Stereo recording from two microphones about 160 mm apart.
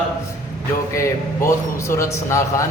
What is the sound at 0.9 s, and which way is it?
A man's voice, 20° left (ahead or behind).